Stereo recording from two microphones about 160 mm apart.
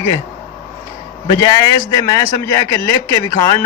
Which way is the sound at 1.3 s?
25° left (ahead or behind).